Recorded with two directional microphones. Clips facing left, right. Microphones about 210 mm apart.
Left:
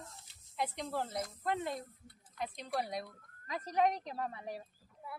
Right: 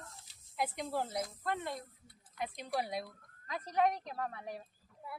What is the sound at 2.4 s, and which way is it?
Speech, centre (ahead or behind).